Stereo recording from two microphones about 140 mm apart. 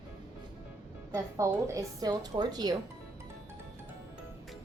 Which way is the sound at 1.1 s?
20° right (ahead or behind).